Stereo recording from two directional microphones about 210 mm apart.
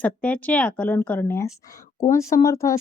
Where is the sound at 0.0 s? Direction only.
5° left (ahead or behind).